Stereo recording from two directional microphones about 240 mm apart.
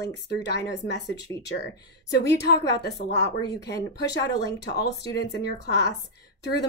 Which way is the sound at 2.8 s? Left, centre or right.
Left.